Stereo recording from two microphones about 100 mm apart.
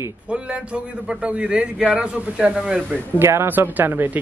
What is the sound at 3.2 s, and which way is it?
Speech, 25° right (ahead or behind).